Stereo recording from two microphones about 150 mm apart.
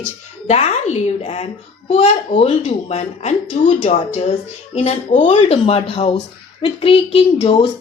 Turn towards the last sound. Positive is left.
turn(degrees=40)  # may be behind; listen again after turning